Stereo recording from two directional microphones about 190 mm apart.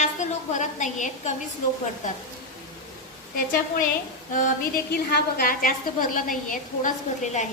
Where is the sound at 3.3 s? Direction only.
45° left (ahead or behind).